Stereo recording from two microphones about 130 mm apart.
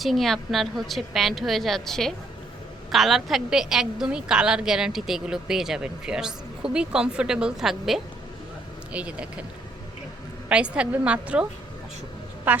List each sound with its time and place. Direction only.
0.0 s a woman's voice: centre (ahead or behind)
10.5 s a woman's voice: 10° right (ahead or behind)
12.5 s a woman's voice: 10° right (ahead or behind)